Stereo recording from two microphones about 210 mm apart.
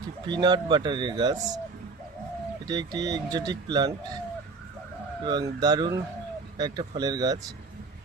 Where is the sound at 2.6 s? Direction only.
20° right (ahead or behind).